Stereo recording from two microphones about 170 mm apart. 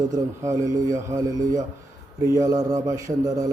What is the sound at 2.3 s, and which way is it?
A man's voice, 20° right (ahead or behind).